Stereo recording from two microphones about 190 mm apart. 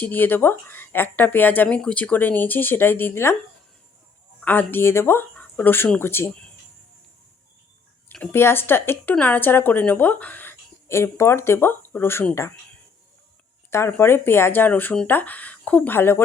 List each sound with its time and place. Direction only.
0.0 s a woman's voice: 10° left (ahead or behind)
4.4 s a woman's voice: 10° left (ahead or behind)
8.1 s a woman's voice: 10° left (ahead or behind)
13.7 s a woman's voice: 15° left (ahead or behind)